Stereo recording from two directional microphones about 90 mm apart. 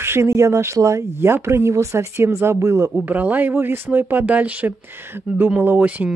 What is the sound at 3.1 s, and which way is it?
Speech, 20° right (ahead or behind).